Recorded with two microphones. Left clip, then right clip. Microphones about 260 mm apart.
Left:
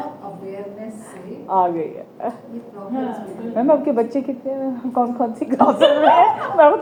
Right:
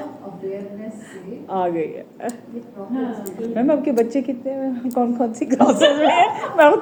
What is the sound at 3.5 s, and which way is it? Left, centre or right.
A woman's voice, centre.